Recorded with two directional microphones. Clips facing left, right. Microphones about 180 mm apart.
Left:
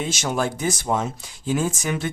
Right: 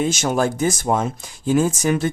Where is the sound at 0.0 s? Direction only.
50° right (ahead or behind).